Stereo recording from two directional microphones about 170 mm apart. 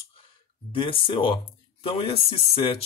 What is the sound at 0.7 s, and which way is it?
Speech, 30° left (ahead or behind).